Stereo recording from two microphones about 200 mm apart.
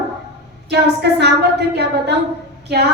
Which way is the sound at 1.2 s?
55° right (ahead or behind).